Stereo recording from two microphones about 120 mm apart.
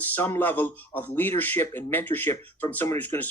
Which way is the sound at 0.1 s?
15° left (ahead or behind).